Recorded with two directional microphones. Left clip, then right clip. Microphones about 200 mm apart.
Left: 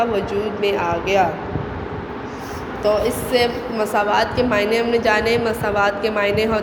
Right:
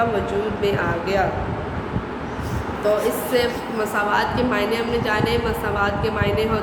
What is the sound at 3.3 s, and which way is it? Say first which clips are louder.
A woman's voice: left 5 dB; 25° left (ahead or behind).